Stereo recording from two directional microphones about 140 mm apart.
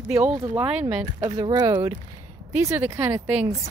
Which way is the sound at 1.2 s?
30° right (ahead or behind).